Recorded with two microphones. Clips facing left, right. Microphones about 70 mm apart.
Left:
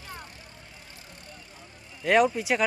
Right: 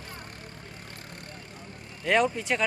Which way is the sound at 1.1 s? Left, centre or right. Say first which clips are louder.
Right 4 dB; right.